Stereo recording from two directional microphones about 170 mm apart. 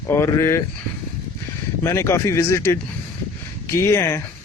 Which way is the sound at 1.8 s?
15° left (ahead or behind).